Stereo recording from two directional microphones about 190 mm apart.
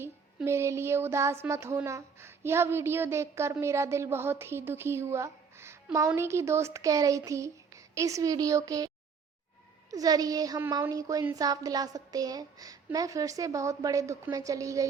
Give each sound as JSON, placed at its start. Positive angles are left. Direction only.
{"t": 0.0, "sound": "speech", "side_deg": -15}
{"t": 9.9, "sound": "speech", "side_deg": -20}